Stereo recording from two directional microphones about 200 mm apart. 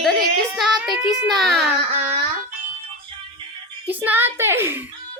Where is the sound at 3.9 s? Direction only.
10° right (ahead or behind).